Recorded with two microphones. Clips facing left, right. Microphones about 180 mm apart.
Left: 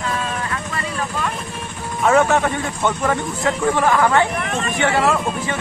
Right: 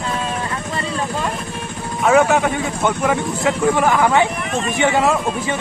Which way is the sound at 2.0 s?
5° right (ahead or behind).